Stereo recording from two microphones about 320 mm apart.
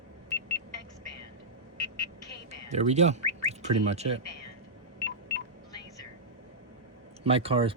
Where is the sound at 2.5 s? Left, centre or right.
Right.